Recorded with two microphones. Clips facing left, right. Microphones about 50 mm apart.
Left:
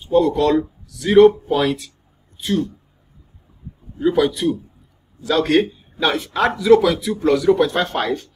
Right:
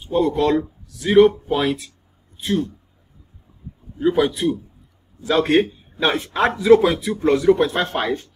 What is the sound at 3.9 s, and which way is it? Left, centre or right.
Speech, centre.